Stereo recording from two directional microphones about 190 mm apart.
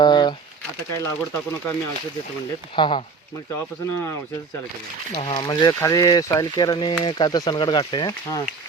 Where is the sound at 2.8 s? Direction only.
25° left (ahead or behind).